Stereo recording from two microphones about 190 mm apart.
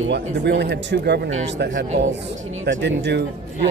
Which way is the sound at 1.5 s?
75° right (ahead or behind).